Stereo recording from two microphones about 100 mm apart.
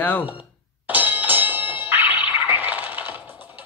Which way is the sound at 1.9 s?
20° right (ahead or behind).